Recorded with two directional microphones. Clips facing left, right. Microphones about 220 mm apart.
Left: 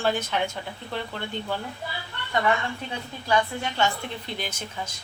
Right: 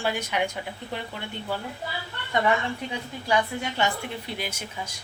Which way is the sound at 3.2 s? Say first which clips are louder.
Left 1 dB; 15° right (ahead or behind).